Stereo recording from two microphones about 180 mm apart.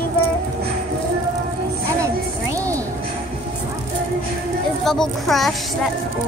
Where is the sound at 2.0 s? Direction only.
15° right (ahead or behind).